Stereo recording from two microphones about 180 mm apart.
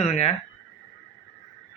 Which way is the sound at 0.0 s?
35° left (ahead or behind).